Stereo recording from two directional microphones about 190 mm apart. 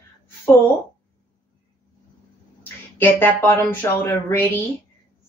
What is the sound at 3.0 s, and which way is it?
Speech, 10° left (ahead or behind).